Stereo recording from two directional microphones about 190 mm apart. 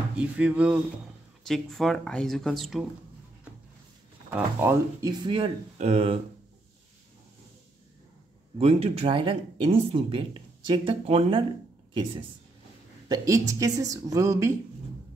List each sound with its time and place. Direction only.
0.2 s a woman's voice: 5° right (ahead or behind)
4.3 s speech: 15° right (ahead or behind); by 6.1 s 30° right (ahead or behind)
8.5 s a woman's voice: 30° right (ahead or behind); by 14.6 s 15° right (ahead or behind)